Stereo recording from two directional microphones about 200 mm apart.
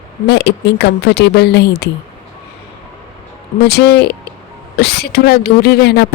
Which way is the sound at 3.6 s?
55° left (ahead or behind).